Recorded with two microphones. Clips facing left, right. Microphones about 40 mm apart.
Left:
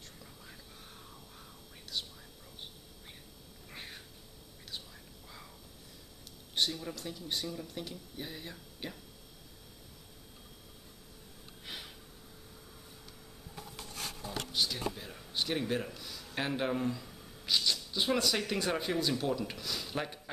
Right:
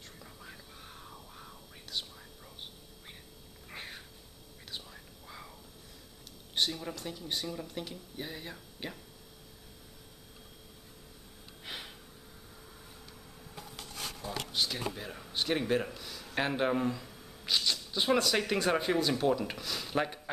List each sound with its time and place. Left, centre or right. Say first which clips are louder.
0.2 s whispering: right 3 dB; centre
3.7 s cat: right 3 dB; centre
4.6 s whispering: right 1 dB; centre
6.5 s speech: right 1 dB; centre
11.6 s gasp: right 2 dB; centre
14.2 s a sound: right 2 dB; right
14.5 s speech: even; centre